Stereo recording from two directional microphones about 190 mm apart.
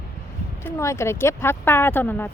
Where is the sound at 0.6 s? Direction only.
15° left (ahead or behind).